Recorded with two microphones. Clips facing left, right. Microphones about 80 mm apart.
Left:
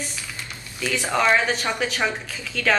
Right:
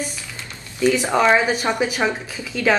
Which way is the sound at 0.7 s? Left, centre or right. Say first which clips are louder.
Right 6 dB; right.